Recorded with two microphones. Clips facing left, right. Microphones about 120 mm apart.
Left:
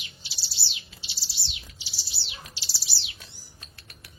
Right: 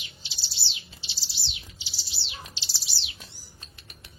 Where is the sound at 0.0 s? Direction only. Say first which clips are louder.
Even; 25° right (ahead or behind).